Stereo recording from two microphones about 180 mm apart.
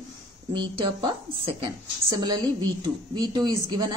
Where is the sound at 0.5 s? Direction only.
25° right (ahead or behind).